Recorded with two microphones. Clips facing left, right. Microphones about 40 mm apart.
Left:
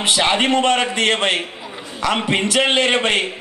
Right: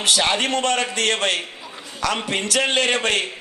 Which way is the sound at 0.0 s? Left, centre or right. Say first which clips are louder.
Left 3 dB; left.